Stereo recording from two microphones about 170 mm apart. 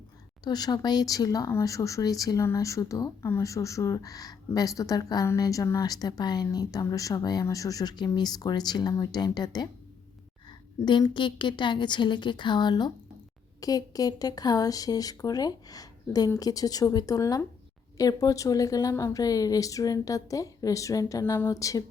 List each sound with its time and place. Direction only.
0.4 s speech: 25° left (ahead or behind)
10.8 s speech: 25° left (ahead or behind)